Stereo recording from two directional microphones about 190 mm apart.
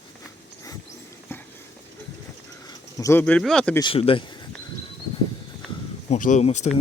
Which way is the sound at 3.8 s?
30° left (ahead or behind).